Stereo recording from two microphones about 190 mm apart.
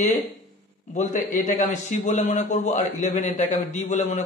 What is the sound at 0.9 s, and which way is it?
A man's voice, 40° left (ahead or behind).